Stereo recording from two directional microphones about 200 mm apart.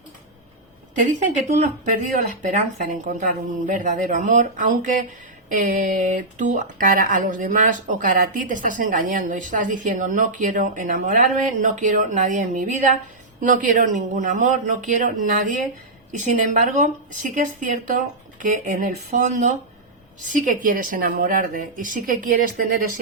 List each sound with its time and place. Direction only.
1.5 s speech: 35° right (ahead or behind)